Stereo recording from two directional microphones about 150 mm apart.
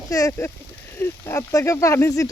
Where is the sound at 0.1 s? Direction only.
20° left (ahead or behind).